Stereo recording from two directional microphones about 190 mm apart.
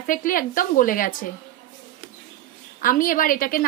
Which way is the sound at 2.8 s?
45° left (ahead or behind).